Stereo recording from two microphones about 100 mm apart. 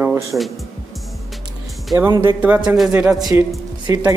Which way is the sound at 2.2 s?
15° right (ahead or behind).